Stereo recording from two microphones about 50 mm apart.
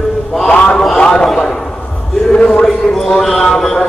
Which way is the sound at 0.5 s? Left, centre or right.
Left.